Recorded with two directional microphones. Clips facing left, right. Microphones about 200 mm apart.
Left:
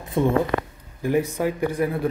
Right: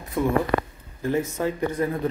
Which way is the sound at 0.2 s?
25° left (ahead or behind).